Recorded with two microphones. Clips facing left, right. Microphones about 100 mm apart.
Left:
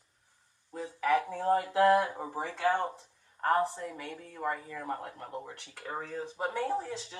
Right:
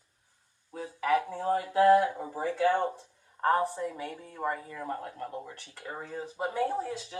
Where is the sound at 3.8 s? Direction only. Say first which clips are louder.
Right 4 dB; 30° right (ahead or behind).